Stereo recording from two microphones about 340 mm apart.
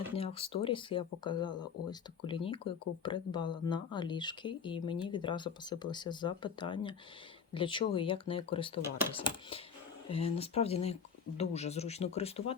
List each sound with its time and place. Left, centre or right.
0.2 s speech: centre